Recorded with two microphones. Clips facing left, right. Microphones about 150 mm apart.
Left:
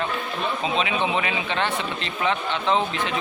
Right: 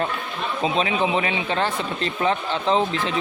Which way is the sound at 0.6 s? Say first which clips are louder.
Right 4 dB; 35° right (ahead or behind).